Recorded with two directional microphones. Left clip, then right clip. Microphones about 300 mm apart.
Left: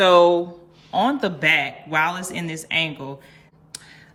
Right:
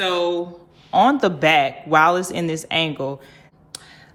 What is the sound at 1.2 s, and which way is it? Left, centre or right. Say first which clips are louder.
Speech: right 3 dB; centre.